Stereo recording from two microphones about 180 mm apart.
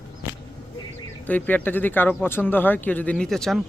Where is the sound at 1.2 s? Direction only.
10° left (ahead or behind).